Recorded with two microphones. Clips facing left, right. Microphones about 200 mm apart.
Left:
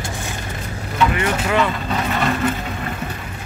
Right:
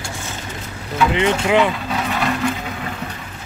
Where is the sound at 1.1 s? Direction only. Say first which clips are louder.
Right 3 dB; 20° right (ahead or behind).